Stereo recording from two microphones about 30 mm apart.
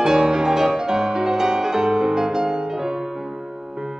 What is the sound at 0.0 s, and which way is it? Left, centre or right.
Music, right.